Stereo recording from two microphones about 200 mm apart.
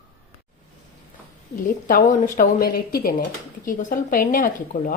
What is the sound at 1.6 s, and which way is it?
Speech, 45° left (ahead or behind).